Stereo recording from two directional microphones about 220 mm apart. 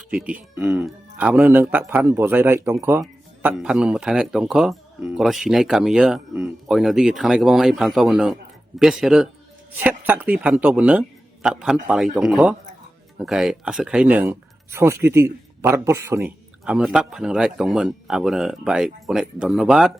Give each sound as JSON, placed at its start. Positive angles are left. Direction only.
{"t": 0.1, "sound": "speech", "side_deg": -5}